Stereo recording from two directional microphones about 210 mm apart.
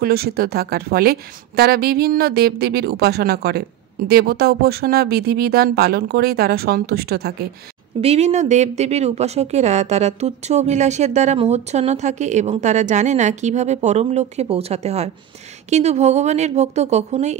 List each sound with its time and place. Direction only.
0.0 s a woman's voice: 45° right (ahead or behind)
8.0 s speech: 30° right (ahead or behind)